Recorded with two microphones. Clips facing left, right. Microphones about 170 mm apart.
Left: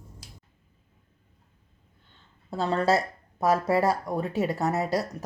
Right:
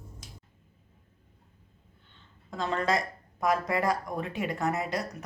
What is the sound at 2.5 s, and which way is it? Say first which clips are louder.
Speech: left 5 dB; 35° left (ahead or behind).